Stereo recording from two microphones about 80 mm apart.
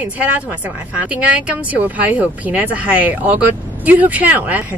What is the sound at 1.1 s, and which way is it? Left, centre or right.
Speech, centre.